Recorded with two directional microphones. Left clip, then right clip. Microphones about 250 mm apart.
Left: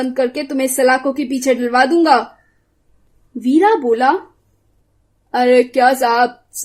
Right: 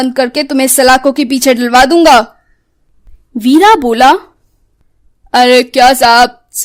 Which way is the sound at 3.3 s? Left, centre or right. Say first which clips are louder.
Right 7 dB; right.